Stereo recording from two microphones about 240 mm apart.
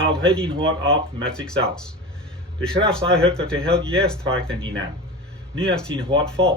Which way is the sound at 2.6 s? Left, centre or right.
Centre.